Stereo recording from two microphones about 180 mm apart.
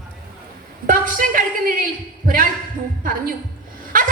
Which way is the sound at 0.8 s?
50° right (ahead or behind).